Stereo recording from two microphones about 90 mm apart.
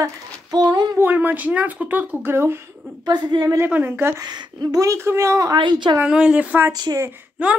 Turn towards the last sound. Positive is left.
turn(degrees=-15)  # may be behind; listen again after turning